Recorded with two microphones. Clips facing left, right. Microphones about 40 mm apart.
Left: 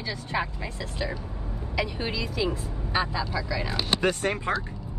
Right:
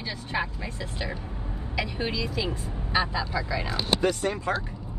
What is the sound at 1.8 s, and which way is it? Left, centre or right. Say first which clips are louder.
Speech: right 1 dB; right.